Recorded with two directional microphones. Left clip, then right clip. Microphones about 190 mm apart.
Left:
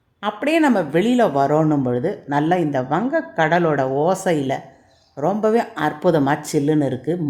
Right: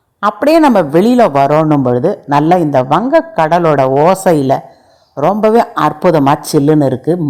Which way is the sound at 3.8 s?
30° right (ahead or behind).